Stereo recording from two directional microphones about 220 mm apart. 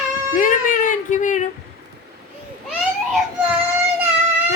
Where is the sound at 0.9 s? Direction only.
35° left (ahead or behind).